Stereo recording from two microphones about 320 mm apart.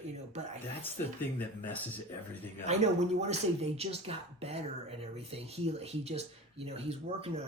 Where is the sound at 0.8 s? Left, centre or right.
Centre.